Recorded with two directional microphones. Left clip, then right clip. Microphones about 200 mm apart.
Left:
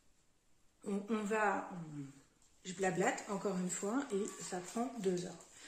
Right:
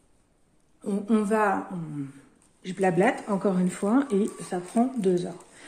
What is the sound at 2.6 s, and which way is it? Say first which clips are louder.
Speech: right 13 dB; 45° right (ahead or behind).